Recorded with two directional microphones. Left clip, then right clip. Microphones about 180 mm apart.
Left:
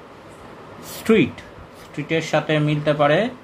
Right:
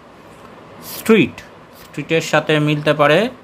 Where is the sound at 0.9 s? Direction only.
30° right (ahead or behind).